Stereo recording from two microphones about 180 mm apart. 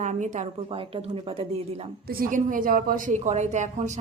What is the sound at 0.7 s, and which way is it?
A woman's voice, 30° right (ahead or behind).